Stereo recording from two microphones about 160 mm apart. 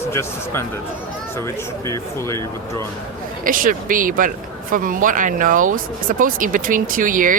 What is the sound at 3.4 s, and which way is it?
Speech, 60° right (ahead or behind).